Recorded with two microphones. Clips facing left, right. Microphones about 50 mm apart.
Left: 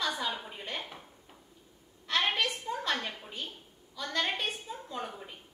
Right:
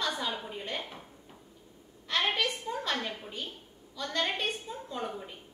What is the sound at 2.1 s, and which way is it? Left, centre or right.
A woman's voice, centre.